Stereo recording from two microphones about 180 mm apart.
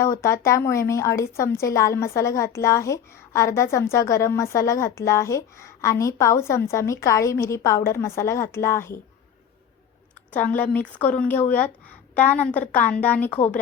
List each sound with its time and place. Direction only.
0.0 s a woman's voice: 15° left (ahead or behind)
10.8 s a woman's voice: 10° left (ahead or behind)
13.3 s speech: 40° left (ahead or behind)